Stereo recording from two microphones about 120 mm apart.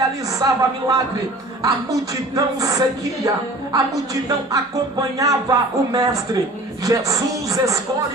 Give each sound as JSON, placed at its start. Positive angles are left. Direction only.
{"t": 0.3, "sound": "speech", "side_deg": -30}